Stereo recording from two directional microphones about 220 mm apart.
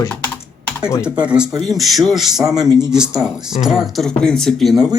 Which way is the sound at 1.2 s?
5° right (ahead or behind).